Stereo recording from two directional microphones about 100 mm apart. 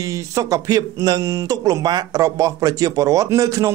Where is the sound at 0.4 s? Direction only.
35° right (ahead or behind).